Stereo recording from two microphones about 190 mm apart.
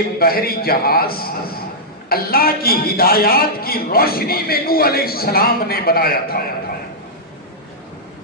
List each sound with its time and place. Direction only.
0.2 s a man's voice: 50° left (ahead or behind)